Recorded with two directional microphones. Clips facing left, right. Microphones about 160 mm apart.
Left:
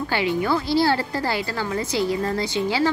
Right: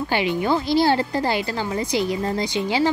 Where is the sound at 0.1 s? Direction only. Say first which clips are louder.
Right 1 dB; 20° right (ahead or behind).